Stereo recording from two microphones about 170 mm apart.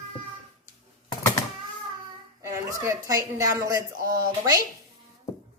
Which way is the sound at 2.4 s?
20° right (ahead or behind).